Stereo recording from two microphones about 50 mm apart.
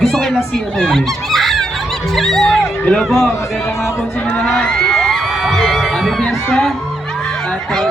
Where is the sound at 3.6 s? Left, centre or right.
Left.